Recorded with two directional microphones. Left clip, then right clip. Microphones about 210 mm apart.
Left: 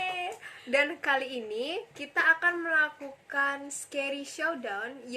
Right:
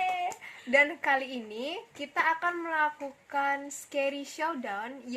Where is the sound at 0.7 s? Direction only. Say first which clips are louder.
Right 2 dB; 35° right (ahead or behind).